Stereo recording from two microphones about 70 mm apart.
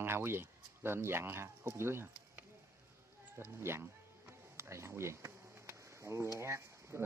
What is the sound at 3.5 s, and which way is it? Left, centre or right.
Music, right.